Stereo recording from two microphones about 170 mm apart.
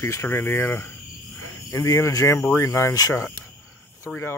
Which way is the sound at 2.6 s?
15° left (ahead or behind).